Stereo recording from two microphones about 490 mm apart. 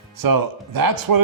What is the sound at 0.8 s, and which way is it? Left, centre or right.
Speech, right.